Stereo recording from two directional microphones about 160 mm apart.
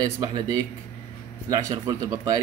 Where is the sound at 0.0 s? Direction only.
25° right (ahead or behind).